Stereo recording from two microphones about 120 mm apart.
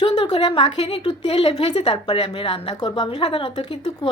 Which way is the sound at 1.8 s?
40° left (ahead or behind).